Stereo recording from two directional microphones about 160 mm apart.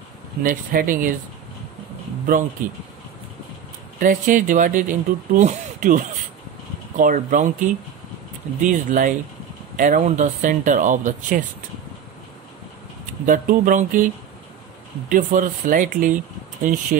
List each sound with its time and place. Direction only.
0.4 s speech: 60° right (ahead or behind)
2.3 s speech: 60° right (ahead or behind)
4.0 s speech: 55° right (ahead or behind)
8.6 s speech: 55° right (ahead or behind)
13.2 s speech: 55° right (ahead or behind)